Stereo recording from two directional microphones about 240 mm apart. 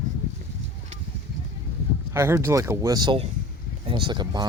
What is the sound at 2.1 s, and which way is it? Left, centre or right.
Speech, centre.